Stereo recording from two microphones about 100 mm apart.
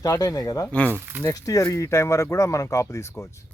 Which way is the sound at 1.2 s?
35° left (ahead or behind).